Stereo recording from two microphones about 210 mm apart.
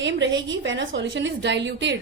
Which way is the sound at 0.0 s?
60° right (ahead or behind).